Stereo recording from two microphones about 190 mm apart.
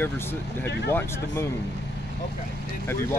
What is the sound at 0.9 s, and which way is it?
Speech, 15° left (ahead or behind).